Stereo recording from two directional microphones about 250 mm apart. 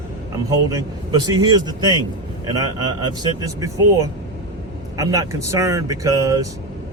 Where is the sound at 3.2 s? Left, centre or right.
Centre.